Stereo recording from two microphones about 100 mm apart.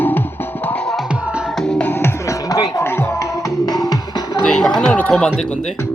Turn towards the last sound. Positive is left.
turn(degrees=10)  # may be behind; listen again after turning